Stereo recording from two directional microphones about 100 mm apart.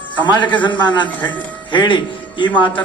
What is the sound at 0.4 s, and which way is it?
A man's voice, 50° left (ahead or behind).